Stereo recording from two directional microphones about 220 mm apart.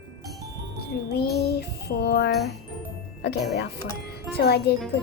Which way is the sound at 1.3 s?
50° left (ahead or behind).